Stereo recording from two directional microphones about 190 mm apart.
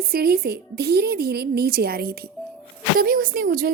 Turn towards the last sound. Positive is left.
turn(degrees=-50)  # may be behind; listen again after turning